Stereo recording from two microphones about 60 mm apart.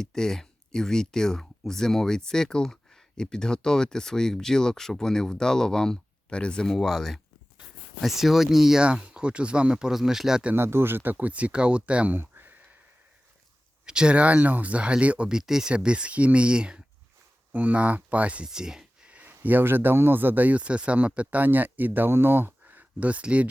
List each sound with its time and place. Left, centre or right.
0.0 s speech: centre
8.8 s speech: centre
10.5 s speech: right; by 12.1 s centre
12.1 s a sound: right
13.8 s speech: centre
15.3 s speech: centre
18.4 s a sound: centre
19.3 s speech: right